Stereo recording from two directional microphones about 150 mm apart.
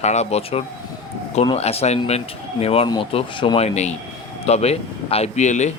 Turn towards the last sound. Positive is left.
turn(degrees=50)  # may be behind; listen again after turning